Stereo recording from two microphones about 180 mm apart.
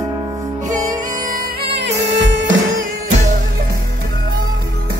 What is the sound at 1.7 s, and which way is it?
Music, 80° right.